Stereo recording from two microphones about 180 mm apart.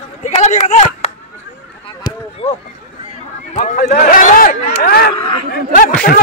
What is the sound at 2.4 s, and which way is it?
A man's voice, 35° left (ahead or behind).